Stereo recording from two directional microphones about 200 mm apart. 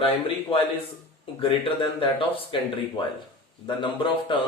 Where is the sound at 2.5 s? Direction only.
25° left (ahead or behind).